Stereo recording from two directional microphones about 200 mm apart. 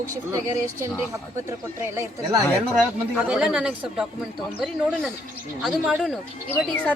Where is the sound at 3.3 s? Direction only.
5° right (ahead or behind).